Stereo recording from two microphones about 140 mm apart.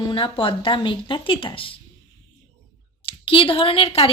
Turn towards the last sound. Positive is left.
turn(degrees=40)  # may be behind; listen again after turning